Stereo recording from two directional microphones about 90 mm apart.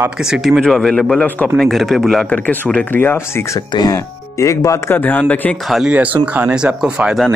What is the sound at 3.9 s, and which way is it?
Speech, 35° left (ahead or behind).